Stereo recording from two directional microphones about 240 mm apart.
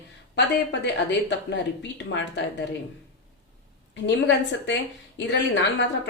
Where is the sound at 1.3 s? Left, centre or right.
Left.